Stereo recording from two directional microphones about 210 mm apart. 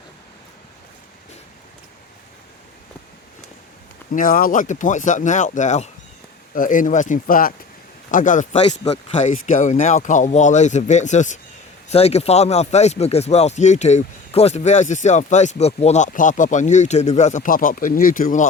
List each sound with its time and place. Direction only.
4.1 s speech: 40° left (ahead or behind)
8.6 s speech: 25° left (ahead or behind)